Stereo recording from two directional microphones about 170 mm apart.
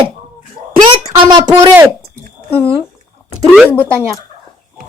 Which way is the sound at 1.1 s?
20° right (ahead or behind).